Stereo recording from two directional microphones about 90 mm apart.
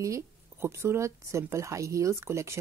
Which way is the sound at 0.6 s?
30° right (ahead or behind).